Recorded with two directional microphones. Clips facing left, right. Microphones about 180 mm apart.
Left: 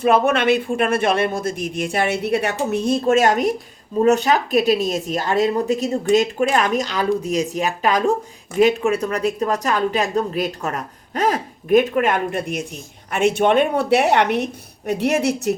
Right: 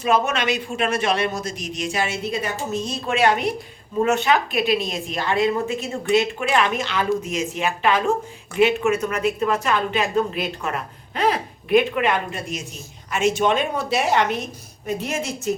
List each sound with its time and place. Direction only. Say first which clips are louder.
0.0 s a woman's voice: left 5 dB; 55° left (ahead or behind)